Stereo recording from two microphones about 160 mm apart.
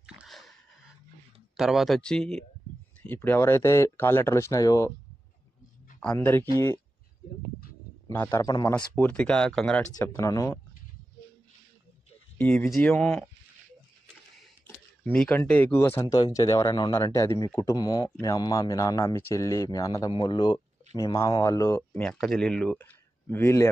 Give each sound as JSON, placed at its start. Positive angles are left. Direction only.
{"t": 0.0, "sound": "a sound", "side_deg": -5}
{"t": 1.6, "sound": "speech", "side_deg": 0}
{"t": 6.1, "sound": "speech", "side_deg": 15}
{"t": 8.1, "sound": "speech", "side_deg": 15}
{"t": 9.0, "sound": "speech", "side_deg": 5}
{"t": 9.9, "sound": "speech", "side_deg": 20}
{"t": 12.4, "sound": "speech", "side_deg": 10}
{"t": 15.0, "sound": "speech", "side_deg": 10}
{"t": 22.0, "sound": "speech", "side_deg": 5}